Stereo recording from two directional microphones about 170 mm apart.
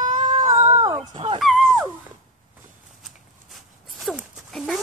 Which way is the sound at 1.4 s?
Centre (ahead or behind).